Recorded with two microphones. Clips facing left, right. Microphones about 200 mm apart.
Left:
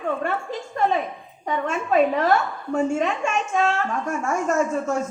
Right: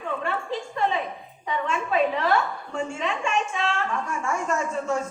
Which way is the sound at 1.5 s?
45° left (ahead or behind).